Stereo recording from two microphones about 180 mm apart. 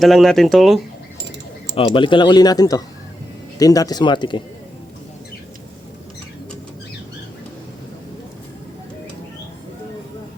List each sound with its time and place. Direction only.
0.0 s speech: centre (ahead or behind)
1.7 s speech: 30° left (ahead or behind)